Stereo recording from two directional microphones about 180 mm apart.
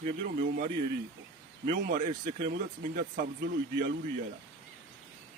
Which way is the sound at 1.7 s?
45° right (ahead or behind).